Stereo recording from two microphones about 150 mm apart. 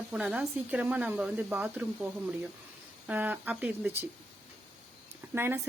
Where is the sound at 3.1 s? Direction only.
10° right (ahead or behind).